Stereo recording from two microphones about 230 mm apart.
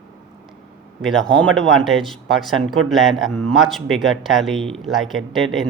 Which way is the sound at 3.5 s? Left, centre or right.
Centre.